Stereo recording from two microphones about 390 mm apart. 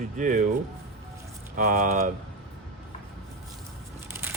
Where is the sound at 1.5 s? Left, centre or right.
Right.